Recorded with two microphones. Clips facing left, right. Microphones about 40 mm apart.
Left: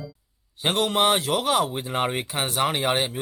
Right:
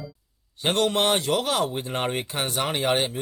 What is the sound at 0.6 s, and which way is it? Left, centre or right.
Speech, centre.